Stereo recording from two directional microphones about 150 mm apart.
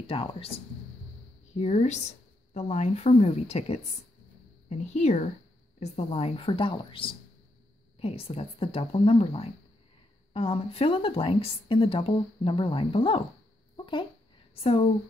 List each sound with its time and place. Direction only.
0.0 s a woman's voice: 35° left (ahead or behind)
1.5 s a woman's voice: 50° left (ahead or behind)
13.7 s a sound: 30° left (ahead or behind)
14.5 s speech: 40° left (ahead or behind)